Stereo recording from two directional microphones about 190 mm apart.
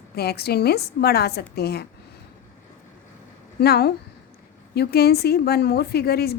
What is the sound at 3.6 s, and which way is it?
A woman's voice, 55° left (ahead or behind).